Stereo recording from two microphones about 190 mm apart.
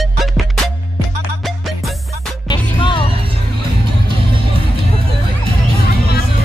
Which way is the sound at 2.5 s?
25° left (ahead or behind).